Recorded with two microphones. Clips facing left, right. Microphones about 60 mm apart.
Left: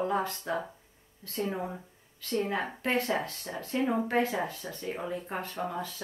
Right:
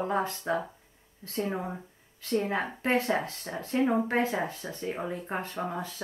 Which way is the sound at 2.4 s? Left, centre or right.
Right.